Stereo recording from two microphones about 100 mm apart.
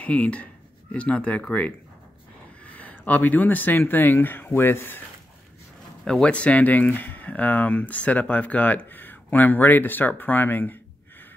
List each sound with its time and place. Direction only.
0.0 s speech: 15° left (ahead or behind)
6.0 s speech: 10° left (ahead or behind)